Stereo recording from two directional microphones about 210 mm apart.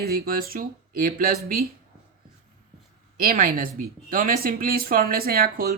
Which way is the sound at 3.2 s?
45° right (ahead or behind).